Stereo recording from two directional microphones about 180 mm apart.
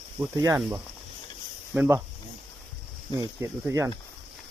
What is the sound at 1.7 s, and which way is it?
Speech, 10° right (ahead or behind).